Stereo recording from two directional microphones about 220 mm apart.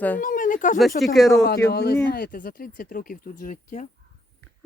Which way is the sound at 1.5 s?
45° left (ahead or behind).